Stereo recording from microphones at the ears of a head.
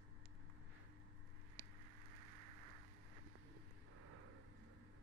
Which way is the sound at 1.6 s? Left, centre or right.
Right.